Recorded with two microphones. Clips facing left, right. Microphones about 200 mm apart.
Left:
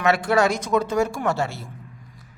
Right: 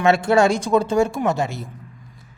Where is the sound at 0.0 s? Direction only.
25° right (ahead or behind).